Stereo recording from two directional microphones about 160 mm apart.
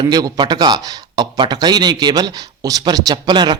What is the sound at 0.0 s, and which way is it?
Speech, 25° right (ahead or behind).